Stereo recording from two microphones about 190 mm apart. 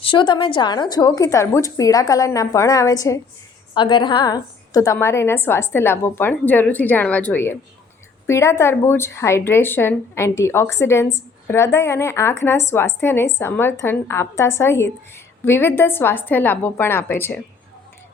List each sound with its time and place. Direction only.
0.0 s a woman's voice: 25° left (ahead or behind)